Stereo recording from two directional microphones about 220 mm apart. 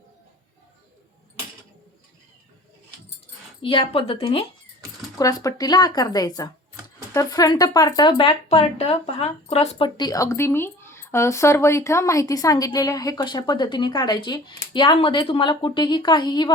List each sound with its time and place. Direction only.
3.6 s speech: 25° left (ahead or behind)